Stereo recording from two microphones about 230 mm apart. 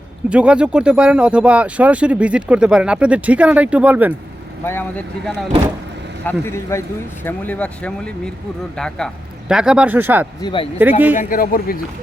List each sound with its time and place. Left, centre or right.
0.3 s speech: centre
4.6 s speech: centre
10.4 s speech: left
11.2 s speech: left